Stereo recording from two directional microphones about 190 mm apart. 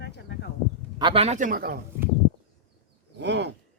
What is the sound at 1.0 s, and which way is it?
Speech, 30° right (ahead or behind).